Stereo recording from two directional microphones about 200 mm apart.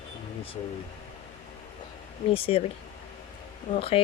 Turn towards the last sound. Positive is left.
turn(degrees=30)  # may be behind; listen again after turning